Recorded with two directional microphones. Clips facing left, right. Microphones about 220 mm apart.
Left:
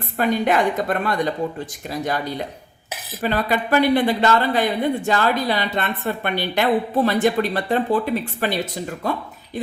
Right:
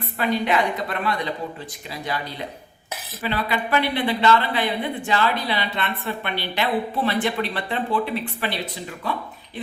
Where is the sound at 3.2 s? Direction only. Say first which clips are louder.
Left 4 dB; 45° left (ahead or behind).